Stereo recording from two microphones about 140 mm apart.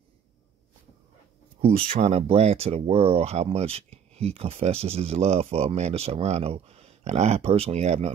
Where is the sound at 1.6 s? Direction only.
40° right (ahead or behind).